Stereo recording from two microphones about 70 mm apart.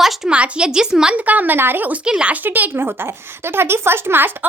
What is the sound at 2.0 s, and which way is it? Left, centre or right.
Speech, centre.